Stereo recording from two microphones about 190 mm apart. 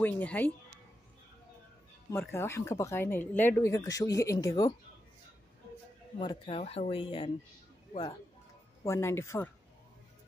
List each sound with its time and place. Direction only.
0.0 s speech: 10° left (ahead or behind)
2.0 s speech: 15° left (ahead or behind)
6.1 s speech: 30° left (ahead or behind)
8.8 s speech: 15° left (ahead or behind)